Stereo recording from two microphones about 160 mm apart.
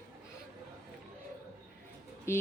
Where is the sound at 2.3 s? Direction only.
15° left (ahead or behind).